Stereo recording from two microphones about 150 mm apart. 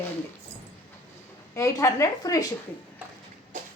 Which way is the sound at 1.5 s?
20° left (ahead or behind).